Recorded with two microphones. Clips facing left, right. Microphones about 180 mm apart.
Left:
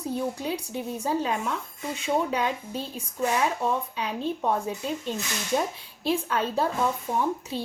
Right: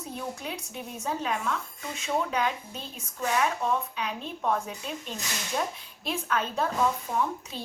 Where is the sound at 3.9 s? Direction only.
30° left (ahead or behind).